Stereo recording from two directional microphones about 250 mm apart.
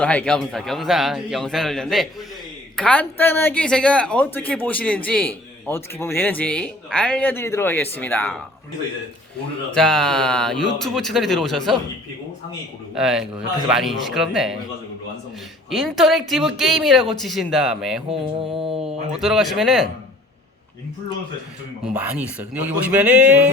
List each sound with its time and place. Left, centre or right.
0.0 s speech: centre
9.7 s speech: centre
12.9 s speech: centre
15.7 s speech: centre
18.1 s music: right
19.1 s speech: centre
21.9 s speech: centre